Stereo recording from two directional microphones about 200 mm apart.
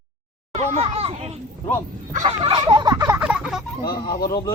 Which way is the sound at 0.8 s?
30° right (ahead or behind).